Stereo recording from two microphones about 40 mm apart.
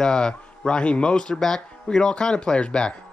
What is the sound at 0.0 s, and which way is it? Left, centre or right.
Speech, centre.